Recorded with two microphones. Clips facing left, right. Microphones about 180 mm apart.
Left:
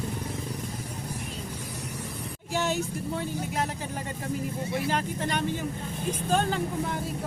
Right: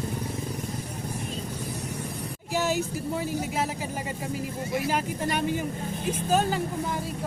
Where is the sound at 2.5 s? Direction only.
5° right (ahead or behind).